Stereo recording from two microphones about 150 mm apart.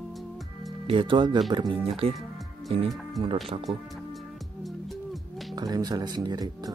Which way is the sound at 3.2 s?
Centre (ahead or behind).